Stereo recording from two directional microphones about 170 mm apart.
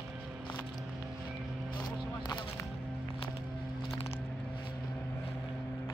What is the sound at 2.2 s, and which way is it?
Music, 25° left (ahead or behind).